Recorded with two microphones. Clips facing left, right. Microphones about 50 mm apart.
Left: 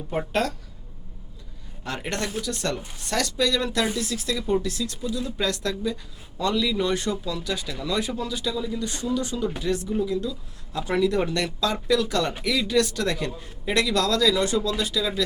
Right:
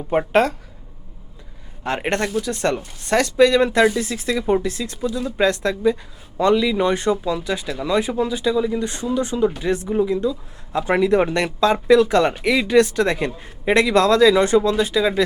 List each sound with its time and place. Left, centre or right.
0.1 s speech: right
1.8 s speech: right